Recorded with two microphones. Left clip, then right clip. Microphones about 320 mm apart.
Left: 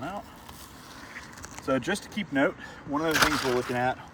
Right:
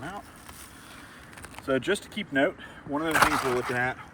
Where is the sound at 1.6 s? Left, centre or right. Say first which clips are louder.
Right 1 dB; centre.